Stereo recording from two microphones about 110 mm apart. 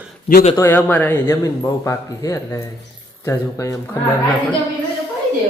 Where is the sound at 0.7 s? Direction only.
15° left (ahead or behind).